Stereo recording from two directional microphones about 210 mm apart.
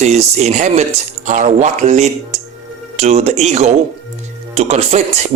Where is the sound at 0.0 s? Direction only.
30° right (ahead or behind).